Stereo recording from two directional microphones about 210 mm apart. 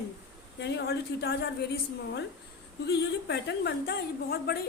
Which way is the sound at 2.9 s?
50° left (ahead or behind).